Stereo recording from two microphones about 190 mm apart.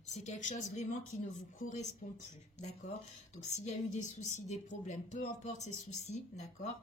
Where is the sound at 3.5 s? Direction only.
35° left (ahead or behind).